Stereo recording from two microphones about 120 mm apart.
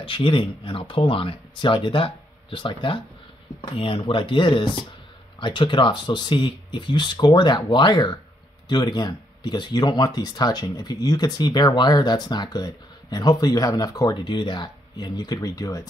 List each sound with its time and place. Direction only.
0.0 s speech: 45° left (ahead or behind); by 15.9 s 30° left (ahead or behind)